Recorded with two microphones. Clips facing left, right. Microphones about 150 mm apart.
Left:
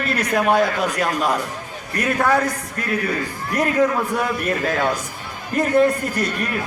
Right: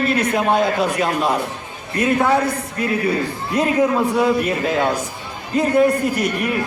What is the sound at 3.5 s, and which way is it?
A man's voice, 25° right (ahead or behind).